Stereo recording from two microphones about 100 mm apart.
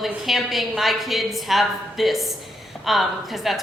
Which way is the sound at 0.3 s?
Centre (ahead or behind).